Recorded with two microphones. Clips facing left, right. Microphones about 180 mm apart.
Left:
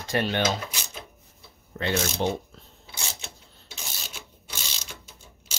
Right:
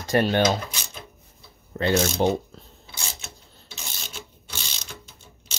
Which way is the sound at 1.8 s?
40° right (ahead or behind).